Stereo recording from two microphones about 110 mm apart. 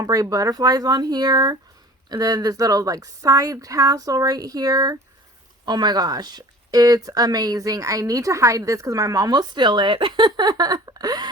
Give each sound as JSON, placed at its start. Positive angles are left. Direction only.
{"t": 0.0, "sound": "speech", "side_deg": -35}